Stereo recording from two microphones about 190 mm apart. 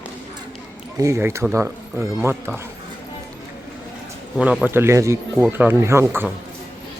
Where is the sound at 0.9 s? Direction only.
15° right (ahead or behind).